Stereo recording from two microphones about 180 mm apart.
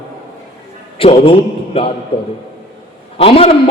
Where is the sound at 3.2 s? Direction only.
35° left (ahead or behind).